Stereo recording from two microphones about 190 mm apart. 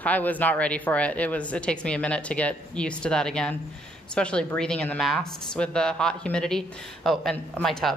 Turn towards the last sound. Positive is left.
turn(degrees=0)  # may be behind; listen again after turning